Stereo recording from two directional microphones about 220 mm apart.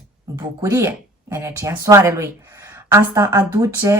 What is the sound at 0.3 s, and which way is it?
Speech, 10° right (ahead or behind).